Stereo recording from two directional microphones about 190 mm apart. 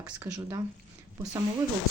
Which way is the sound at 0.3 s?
15° right (ahead or behind).